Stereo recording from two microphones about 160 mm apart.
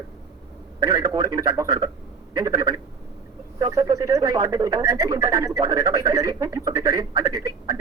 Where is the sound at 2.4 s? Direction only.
20° right (ahead or behind).